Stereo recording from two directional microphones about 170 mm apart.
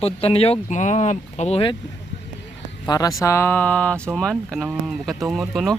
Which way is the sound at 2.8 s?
25° left (ahead or behind).